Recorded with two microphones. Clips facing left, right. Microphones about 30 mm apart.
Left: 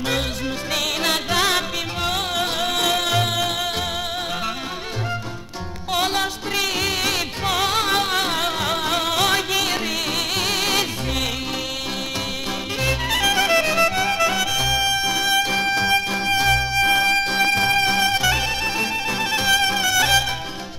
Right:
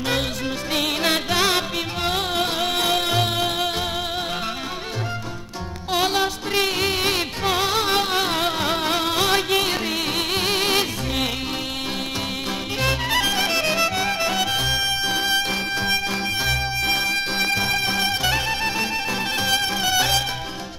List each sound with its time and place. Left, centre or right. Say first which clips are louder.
6.5 s music: even; right
10.6 s music: even; right
13.1 s clarinet: left 3 dB; left
13.4 s music: left 3 dB; right
14.0 s music: left 2 dB; left
16.7 s music: left 5 dB; left
17.4 s music: left 3 dB; left